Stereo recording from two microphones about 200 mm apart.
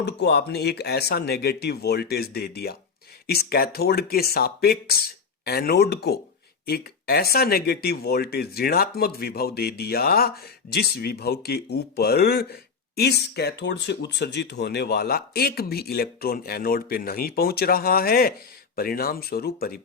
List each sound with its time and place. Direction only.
0.0 s speech: 60° left (ahead or behind)